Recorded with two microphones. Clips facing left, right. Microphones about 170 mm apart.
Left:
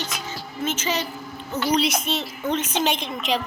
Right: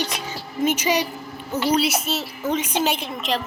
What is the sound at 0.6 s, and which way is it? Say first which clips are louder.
A woman's voice: right 5 dB; 15° right (ahead or behind).